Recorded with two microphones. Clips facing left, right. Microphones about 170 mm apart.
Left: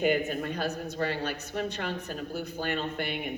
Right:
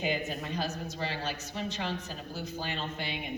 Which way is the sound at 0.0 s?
55° left (ahead or behind).